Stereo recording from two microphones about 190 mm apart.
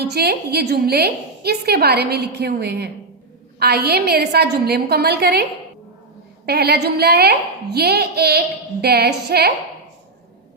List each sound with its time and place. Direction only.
0.0 s a woman's voice: 60° right (ahead or behind)